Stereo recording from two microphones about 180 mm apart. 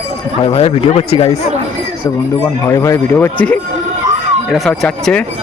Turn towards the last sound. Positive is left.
turn(degrees=5)  # may be behind; listen again after turning